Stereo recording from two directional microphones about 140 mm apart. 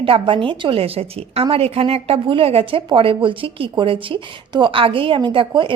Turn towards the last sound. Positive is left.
turn(degrees=-35)  # may be behind; listen again after turning